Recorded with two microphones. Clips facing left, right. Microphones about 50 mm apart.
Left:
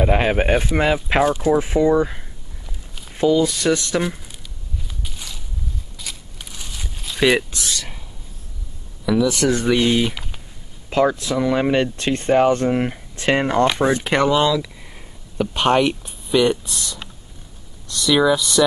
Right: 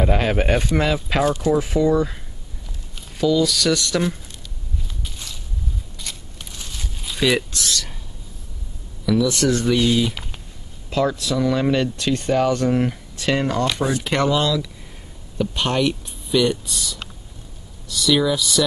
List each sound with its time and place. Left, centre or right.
0.0 s speech: centre
4.0 s speech: centre
5.0 s walk: centre
5.9 s a sound: centre
7.2 s speech: centre
9.0 s speech: centre
10.1 s a sound: centre
10.9 s speech: left
16.6 s speech: centre